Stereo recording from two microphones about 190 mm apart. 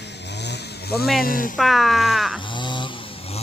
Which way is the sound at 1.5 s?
Centre (ahead or behind).